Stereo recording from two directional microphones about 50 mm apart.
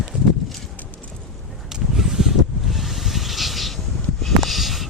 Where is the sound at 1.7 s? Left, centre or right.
Centre.